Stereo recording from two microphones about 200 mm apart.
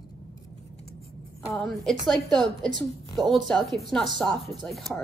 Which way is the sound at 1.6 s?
Centre (ahead or behind).